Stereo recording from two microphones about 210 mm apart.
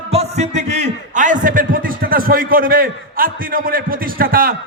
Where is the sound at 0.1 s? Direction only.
30° right (ahead or behind).